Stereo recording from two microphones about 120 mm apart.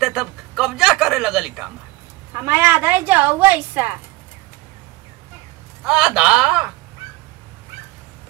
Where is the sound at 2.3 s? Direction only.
15° right (ahead or behind).